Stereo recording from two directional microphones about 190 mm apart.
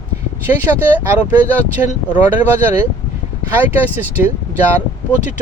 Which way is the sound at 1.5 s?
10° right (ahead or behind).